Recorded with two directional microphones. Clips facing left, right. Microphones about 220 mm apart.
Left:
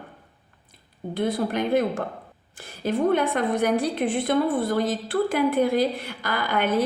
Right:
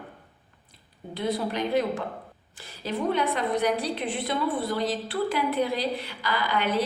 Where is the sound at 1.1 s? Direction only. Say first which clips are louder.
Left 4 dB; 50° left (ahead or behind).